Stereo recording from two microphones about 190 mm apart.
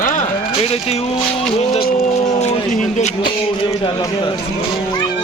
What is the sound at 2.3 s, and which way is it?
Speech, 35° left (ahead or behind).